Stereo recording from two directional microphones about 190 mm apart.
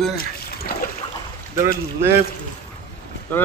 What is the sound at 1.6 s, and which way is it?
Speech, 15° right (ahead or behind).